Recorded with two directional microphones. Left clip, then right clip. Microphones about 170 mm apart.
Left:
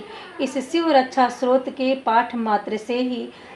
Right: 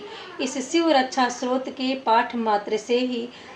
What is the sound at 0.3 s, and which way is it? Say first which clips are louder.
A woman's voice: left 1 dB; 30° left (ahead or behind).